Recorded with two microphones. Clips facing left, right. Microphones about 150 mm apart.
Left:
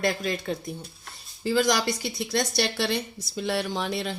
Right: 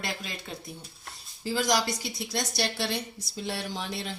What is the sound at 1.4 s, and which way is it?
A woman's voice, 65° left (ahead or behind).